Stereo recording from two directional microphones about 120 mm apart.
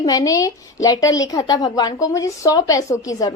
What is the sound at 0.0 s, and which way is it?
A woman's voice, 30° left (ahead or behind).